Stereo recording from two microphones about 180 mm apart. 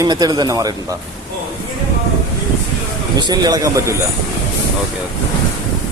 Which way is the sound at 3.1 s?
25° right (ahead or behind).